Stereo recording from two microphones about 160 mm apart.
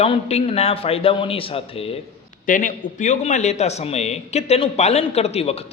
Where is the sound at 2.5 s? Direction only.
55° left (ahead or behind); by 5.6 s 40° left (ahead or behind).